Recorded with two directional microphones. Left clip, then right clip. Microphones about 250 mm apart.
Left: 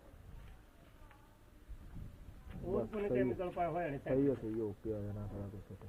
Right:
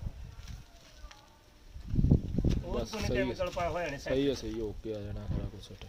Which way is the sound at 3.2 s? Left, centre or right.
Right.